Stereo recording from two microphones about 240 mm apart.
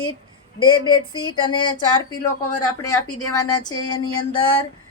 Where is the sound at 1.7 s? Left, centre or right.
Centre.